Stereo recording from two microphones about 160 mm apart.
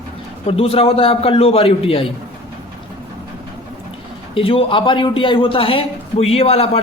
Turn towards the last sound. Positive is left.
turn(degrees=40)  # may be behind; listen again after turning